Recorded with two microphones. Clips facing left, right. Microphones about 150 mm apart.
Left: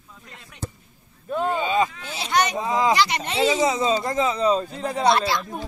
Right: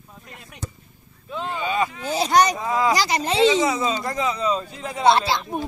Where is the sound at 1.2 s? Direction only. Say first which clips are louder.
Left 6 dB; 45° left (ahead or behind).